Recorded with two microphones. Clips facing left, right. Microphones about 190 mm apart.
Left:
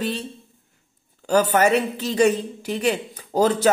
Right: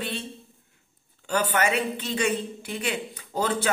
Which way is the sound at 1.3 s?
40° left (ahead or behind).